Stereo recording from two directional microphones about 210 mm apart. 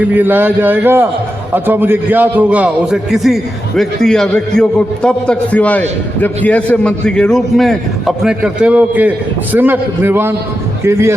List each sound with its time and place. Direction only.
0.1 s a man's voice: 10° right (ahead or behind)